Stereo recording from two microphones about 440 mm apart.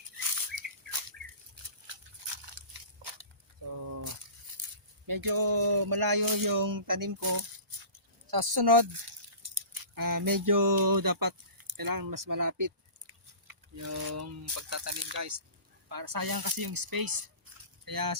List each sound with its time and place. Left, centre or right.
0.2 s bird: right
1.9 s biting: right
4.6 s a sound: right
5.0 s speech: right
15.9 s speech: right